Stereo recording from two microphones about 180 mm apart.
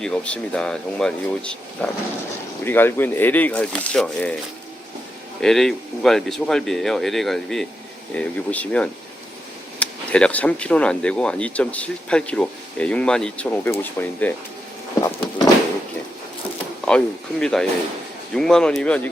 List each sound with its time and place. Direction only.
0.0 s speech: 5° left (ahead or behind)
5.4 s speech: centre (ahead or behind)
15.0 s a sound: 20° left (ahead or behind)
17.4 s speech: 5° left (ahead or behind)